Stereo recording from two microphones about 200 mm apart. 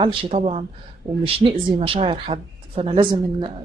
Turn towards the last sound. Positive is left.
turn(degrees=-25)  # may be behind; listen again after turning